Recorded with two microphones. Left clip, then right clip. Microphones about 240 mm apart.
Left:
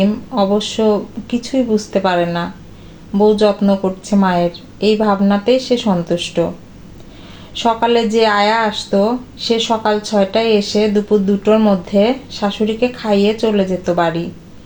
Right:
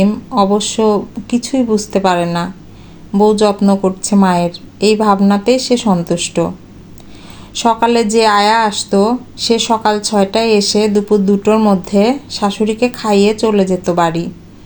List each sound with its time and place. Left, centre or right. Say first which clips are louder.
0.0 s speech: right 3 dB; right
7.6 s speech: right 2 dB; right